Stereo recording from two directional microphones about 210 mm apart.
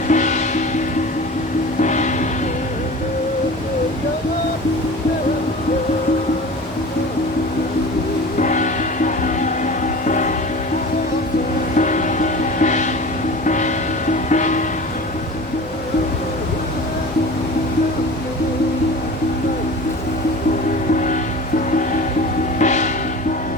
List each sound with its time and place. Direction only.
0.1 s music: 35° left (ahead or behind)
1.8 s music: 35° left (ahead or behind)
8.4 s music: 35° left (ahead or behind)
11.8 s music: 35° left (ahead or behind)
20.9 s music: 35° left (ahead or behind)
22.5 s music: 35° left (ahead or behind)